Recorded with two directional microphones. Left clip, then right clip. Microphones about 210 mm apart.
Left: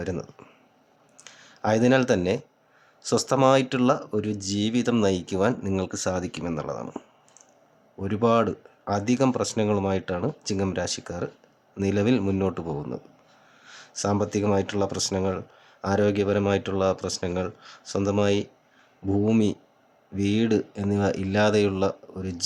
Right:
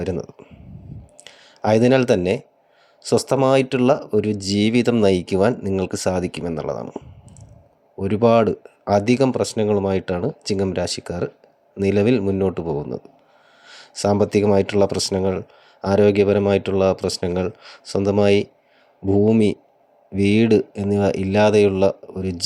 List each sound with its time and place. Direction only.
0.0 s speech: 20° right (ahead or behind)
7.9 s speech: 20° right (ahead or behind)
13.7 s a sound: 20° right (ahead or behind)
14.5 s speech: 20° right (ahead or behind)